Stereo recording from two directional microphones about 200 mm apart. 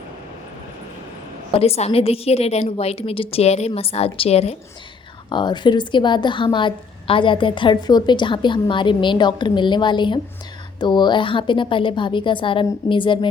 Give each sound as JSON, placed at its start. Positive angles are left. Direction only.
{"t": 1.5, "sound": "a woman's voice", "side_deg": 30}